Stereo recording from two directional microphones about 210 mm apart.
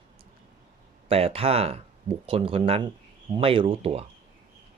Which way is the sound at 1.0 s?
25° right (ahead or behind).